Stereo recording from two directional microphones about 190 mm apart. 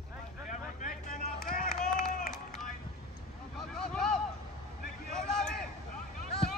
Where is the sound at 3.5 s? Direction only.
5° left (ahead or behind).